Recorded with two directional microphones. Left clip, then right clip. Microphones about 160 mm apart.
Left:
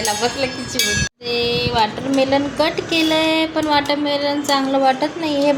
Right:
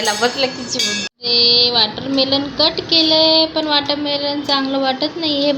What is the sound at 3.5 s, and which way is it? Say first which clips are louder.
A woman's voice: even; 15° left (ahead or behind).